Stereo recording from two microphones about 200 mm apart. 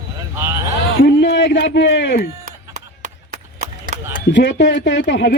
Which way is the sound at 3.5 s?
40° right (ahead or behind).